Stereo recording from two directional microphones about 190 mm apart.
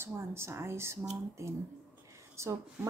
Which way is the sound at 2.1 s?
15° right (ahead or behind).